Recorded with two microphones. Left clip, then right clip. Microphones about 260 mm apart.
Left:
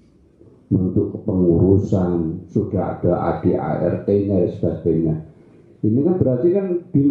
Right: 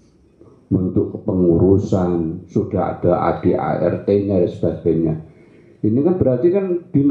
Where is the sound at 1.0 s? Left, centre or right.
Left.